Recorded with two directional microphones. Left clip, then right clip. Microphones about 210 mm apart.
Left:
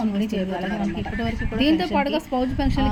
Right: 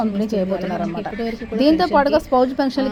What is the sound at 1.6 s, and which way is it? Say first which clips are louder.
Speech: right 6 dB; 25° right (ahead or behind).